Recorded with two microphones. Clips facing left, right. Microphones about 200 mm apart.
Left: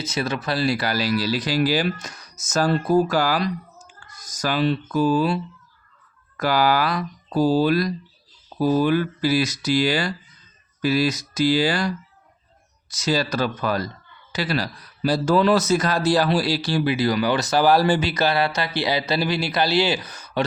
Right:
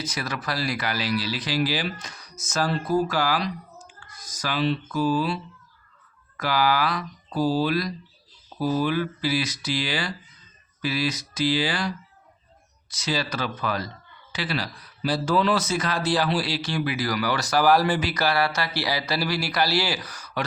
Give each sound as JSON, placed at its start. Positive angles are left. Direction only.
{"t": 0.0, "sound": "speech", "side_deg": 25}
{"t": 12.9, "sound": "speech", "side_deg": 45}